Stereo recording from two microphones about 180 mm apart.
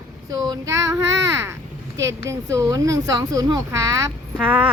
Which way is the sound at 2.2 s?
20° right (ahead or behind).